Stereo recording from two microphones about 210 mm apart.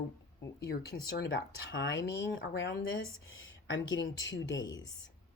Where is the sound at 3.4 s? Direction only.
65° left (ahead or behind).